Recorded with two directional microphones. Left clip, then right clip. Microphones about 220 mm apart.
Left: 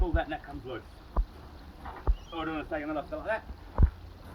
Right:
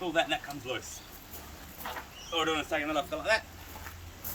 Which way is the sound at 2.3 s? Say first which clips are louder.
Right 5 dB; 20° right (ahead or behind).